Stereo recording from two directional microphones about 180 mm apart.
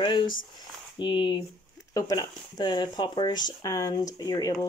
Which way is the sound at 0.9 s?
25° left (ahead or behind).